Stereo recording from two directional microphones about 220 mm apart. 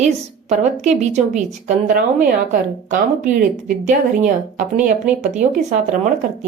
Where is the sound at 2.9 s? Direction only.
35° right (ahead or behind).